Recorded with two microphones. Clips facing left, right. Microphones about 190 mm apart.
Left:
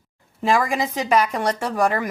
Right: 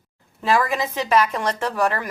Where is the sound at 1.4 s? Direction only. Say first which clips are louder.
Left 2 dB; 10° left (ahead or behind).